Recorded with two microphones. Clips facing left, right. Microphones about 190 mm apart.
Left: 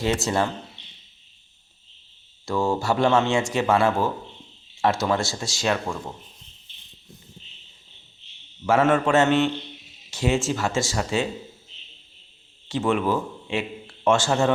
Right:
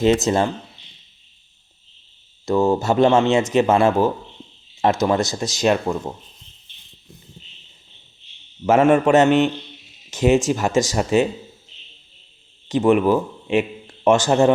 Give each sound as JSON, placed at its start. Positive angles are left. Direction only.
{"t": 0.0, "sound": "speech", "side_deg": -20}
{"t": 2.5, "sound": "speech", "side_deg": -20}
{"t": 8.6, "sound": "speech", "side_deg": -15}
{"t": 12.6, "sound": "a man's voice", "side_deg": -20}